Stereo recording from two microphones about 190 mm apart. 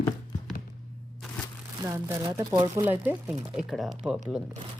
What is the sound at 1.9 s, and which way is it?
Speech, 15° right (ahead or behind).